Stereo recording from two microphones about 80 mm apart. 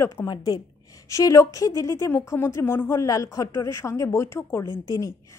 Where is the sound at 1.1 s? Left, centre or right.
Left.